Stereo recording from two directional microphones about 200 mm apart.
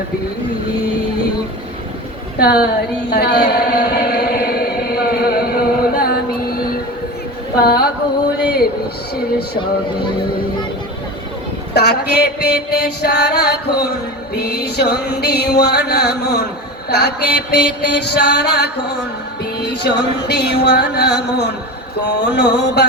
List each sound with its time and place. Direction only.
2.4 s a woman's voice: 55° left (ahead or behind)
3.1 s chant: 55° left (ahead or behind)
7.6 s a woman's voice: 50° left (ahead or behind)
8.4 s a sound: 55° left (ahead or behind)
11.7 s mantra: 55° left (ahead or behind)